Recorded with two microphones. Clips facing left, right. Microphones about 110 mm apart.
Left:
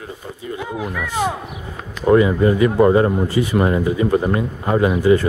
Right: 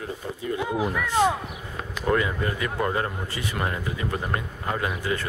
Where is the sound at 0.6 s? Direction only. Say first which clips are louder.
Even; 5° right (ahead or behind).